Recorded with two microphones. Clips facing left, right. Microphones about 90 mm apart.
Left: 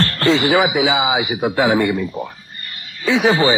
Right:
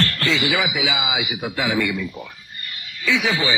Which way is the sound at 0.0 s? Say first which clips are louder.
Left 6 dB; 40° left (ahead or behind).